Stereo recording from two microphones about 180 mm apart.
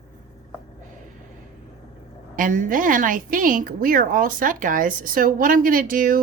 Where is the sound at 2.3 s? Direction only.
45° right (ahead or behind).